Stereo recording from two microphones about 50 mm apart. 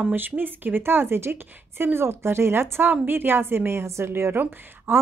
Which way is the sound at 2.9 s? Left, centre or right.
Right.